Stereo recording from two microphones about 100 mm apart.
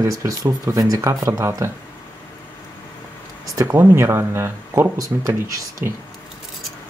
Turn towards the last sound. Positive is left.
turn(degrees=-30)  # may be behind; listen again after turning